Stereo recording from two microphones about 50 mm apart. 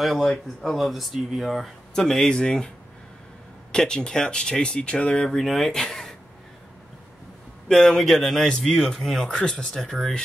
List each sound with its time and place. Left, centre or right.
0.0 s speech: centre
2.0 s speech: centre
3.7 s speech: centre
5.3 s speech: centre
7.6 s speech: centre